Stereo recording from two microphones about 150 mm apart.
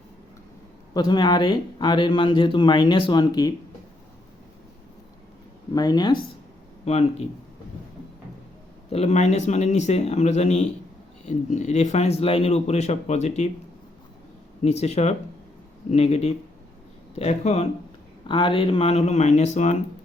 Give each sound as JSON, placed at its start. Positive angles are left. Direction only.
{"t": 0.9, "sound": "speech", "side_deg": 30}
{"t": 5.7, "sound": "speech", "side_deg": 25}
{"t": 6.8, "sound": "speech", "side_deg": 45}
{"t": 8.9, "sound": "speech", "side_deg": 45}
{"t": 14.6, "sound": "speech", "side_deg": 45}
{"t": 18.3, "sound": "speech", "side_deg": 35}